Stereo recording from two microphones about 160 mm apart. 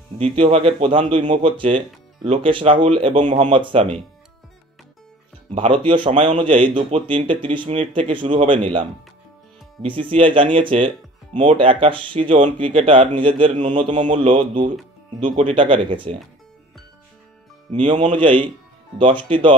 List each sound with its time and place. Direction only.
0.2 s speech: 40° right (ahead or behind)
1.1 s mantra: 50° right (ahead or behind)
1.4 s speech: 35° right (ahead or behind)
5.5 s speech: 35° right (ahead or behind)
9.8 s speech: 30° right (ahead or behind)
13.6 s mantra: 50° right (ahead or behind)
13.9 s speech: 45° right (ahead or behind)
18.0 s speech: 30° right (ahead or behind)